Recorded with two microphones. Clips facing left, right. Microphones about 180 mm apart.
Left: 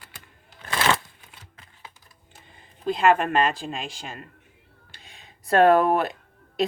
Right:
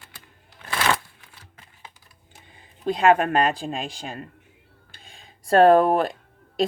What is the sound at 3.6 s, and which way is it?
Speech, 40° right (ahead or behind).